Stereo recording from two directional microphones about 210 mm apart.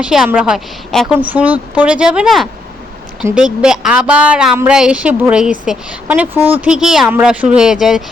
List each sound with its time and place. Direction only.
0.0 s speech: 5° right (ahead or behind)